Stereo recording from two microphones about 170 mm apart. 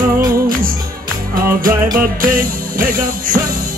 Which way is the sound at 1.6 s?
55° right (ahead or behind).